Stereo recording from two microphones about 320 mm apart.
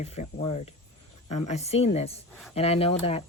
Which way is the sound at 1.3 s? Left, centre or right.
Left.